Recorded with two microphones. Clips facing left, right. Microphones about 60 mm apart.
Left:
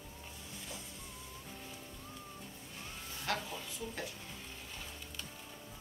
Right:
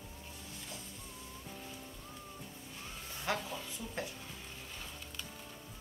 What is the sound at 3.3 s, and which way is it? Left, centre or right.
Speech, centre.